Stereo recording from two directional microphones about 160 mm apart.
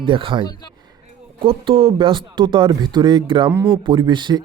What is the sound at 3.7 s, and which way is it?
Speech, 30° right (ahead or behind).